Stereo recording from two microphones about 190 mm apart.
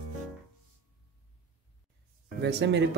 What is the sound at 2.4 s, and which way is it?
Speech, 65° right (ahead or behind).